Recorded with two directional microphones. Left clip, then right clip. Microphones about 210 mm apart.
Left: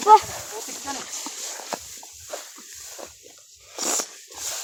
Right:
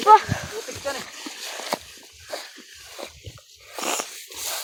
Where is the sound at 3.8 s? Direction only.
10° left (ahead or behind).